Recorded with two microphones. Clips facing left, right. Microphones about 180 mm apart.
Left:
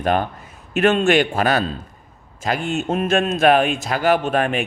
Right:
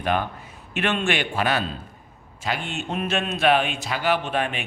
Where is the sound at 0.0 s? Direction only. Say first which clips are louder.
Left 4 dB; 45° left (ahead or behind).